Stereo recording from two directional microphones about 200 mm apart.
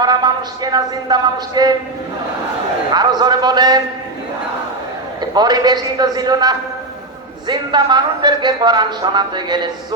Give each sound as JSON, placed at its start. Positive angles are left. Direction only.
{"t": 0.0, "sound": "a woman's voice", "side_deg": -20}
{"t": 2.9, "sound": "a woman's voice", "side_deg": -20}
{"t": 5.3, "sound": "a woman's voice", "side_deg": -20}